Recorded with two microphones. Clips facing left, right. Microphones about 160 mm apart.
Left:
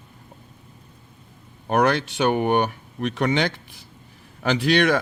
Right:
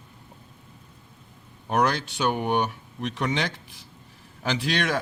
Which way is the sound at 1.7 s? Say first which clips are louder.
Left 4 dB; 60° left (ahead or behind).